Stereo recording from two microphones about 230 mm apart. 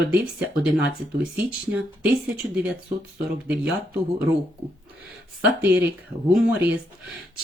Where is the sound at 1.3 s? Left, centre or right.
Centre.